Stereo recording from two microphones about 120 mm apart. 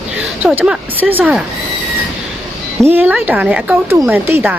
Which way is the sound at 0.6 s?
5° right (ahead or behind).